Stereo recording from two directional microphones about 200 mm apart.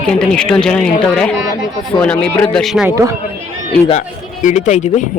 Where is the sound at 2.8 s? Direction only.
15° right (ahead or behind).